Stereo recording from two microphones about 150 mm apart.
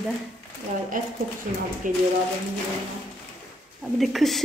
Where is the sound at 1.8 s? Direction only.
60° right (ahead or behind).